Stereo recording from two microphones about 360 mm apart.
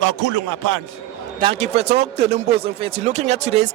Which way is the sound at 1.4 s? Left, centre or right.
Centre.